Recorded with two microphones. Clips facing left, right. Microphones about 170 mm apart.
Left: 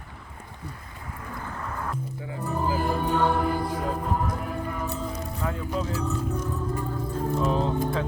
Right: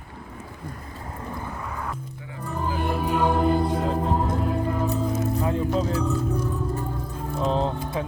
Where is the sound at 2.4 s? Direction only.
10° left (ahead or behind); by 4.9 s 30° right (ahead or behind).